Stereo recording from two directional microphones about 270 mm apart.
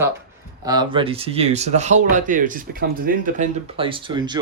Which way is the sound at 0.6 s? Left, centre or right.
Centre.